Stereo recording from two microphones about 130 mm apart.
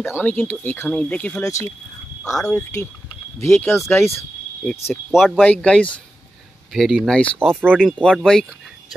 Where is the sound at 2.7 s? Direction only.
25° left (ahead or behind).